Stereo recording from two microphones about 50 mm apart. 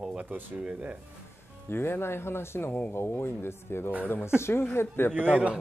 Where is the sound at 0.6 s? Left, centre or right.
Right.